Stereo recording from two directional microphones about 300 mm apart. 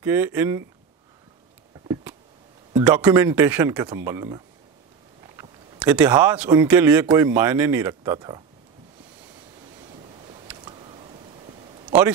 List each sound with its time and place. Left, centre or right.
0.0 s speech: centre
2.7 s speech: centre
5.4 s speech: centre
10.6 s a sound: centre